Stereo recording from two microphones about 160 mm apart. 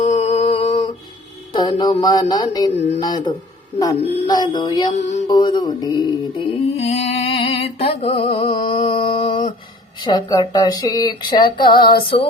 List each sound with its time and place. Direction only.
0.0 s music: 45° left (ahead or behind)
1.8 s speech: 25° left (ahead or behind)
4.9 s music: 45° left (ahead or behind)
5.3 s music: 30° left (ahead or behind)
8.8 s a sound: 35° left (ahead or behind)
10.0 s speech: 25° left (ahead or behind)